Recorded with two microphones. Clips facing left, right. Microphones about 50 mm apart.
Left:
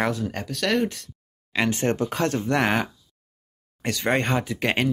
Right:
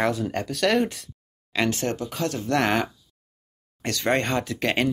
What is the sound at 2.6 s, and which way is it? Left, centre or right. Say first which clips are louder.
Speech: even; centre.